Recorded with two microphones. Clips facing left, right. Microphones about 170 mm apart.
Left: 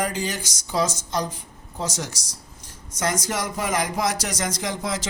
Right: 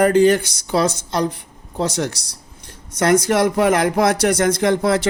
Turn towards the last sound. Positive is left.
turn(degrees=-60)  # may be behind; listen again after turning